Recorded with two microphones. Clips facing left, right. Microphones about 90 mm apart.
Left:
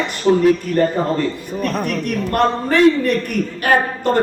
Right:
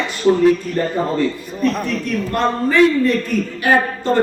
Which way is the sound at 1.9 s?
60° left (ahead or behind).